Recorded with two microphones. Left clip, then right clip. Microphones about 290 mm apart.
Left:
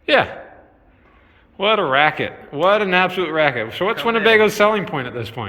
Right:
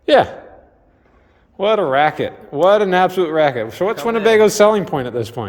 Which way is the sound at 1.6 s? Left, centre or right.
Centre.